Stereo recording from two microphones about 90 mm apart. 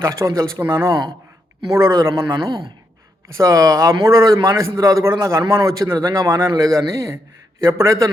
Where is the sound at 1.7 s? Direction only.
40° right (ahead or behind).